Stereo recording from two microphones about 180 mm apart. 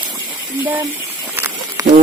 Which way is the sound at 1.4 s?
15° right (ahead or behind).